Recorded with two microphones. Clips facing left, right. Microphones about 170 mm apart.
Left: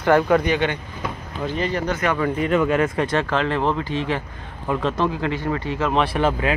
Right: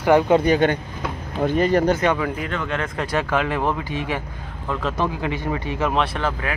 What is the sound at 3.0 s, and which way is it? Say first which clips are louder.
Speech: left 1 dB; 10° right (ahead or behind).